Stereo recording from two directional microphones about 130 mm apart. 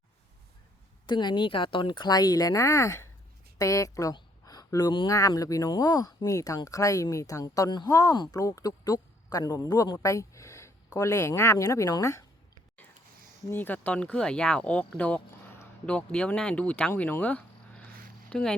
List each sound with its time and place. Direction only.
1.0 s speech: 35° left (ahead or behind)
13.5 s speech: 15° left (ahead or behind)